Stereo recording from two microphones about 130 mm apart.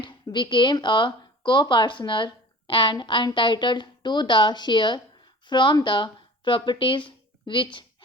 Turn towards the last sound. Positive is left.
turn(degrees=35)  # may be behind; listen again after turning